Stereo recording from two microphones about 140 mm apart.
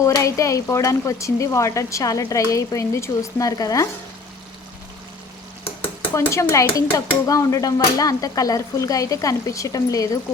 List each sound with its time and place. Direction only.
0.0 s dishes: 20° left (ahead or behind)
6.1 s dishes: 20° left (ahead or behind)